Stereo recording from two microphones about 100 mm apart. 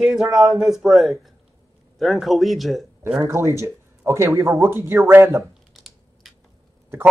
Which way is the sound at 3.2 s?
30° right (ahead or behind).